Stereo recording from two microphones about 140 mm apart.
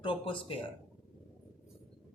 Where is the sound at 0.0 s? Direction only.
40° left (ahead or behind).